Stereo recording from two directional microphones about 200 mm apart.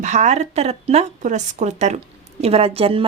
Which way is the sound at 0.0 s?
35° right (ahead or behind).